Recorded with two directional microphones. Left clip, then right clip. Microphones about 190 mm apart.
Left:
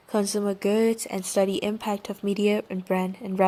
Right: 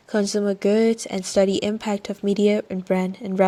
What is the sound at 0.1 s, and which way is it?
A woman's voice, 10° right (ahead or behind).